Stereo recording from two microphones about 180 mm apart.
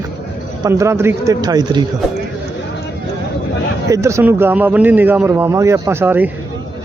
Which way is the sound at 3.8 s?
15° right (ahead or behind).